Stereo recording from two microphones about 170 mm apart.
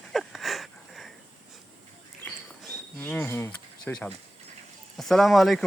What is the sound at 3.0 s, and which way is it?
Speech, 10° left (ahead or behind).